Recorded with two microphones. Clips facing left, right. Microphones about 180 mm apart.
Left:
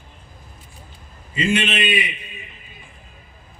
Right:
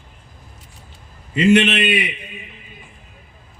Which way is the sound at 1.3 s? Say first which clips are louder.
Right 7 dB; 65° right (ahead or behind).